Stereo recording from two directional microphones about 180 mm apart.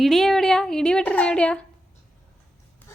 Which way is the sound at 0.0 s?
Centre (ahead or behind).